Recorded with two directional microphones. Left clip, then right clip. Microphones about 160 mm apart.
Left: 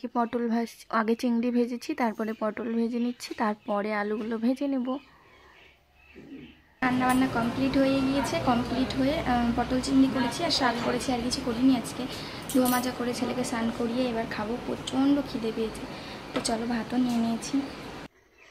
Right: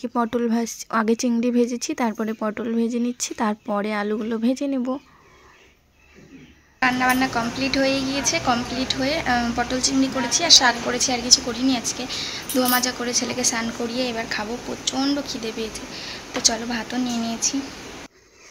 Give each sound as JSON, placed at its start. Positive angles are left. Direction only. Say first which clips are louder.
{"t": 0.0, "sound": "speech", "louder": "right 5 dB", "side_deg": -30}
{"t": 6.8, "sound": "a woman's voice", "louder": "right 6 dB", "side_deg": 0}